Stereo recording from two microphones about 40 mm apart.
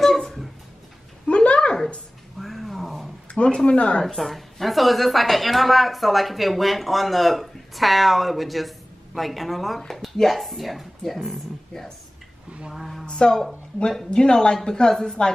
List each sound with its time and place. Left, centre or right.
1.2 s a sound: left
2.3 s cat: centre
3.4 s speech: centre
3.7 s speech: left
4.2 s a woman's voice: centre
11.7 s a woman's voice: centre
12.7 s a woman's voice: centre
13.1 s a woman's voice: centre